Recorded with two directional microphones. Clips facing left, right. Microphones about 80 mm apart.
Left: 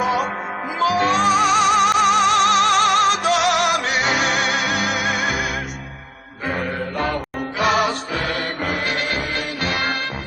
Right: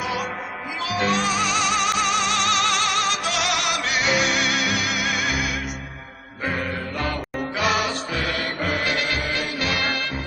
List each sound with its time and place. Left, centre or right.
0.0 s music: left
9.6 s music: left